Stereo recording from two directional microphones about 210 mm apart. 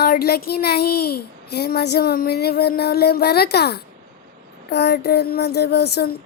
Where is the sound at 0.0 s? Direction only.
45° left (ahead or behind).